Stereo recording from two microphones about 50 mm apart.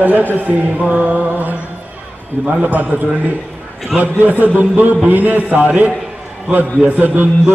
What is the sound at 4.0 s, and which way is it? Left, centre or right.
A man's voice, right.